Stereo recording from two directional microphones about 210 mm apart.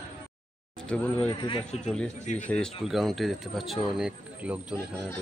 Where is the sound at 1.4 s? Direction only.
25° left (ahead or behind).